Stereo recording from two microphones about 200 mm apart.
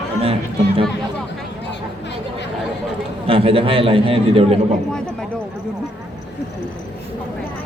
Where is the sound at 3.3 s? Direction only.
30° right (ahead or behind).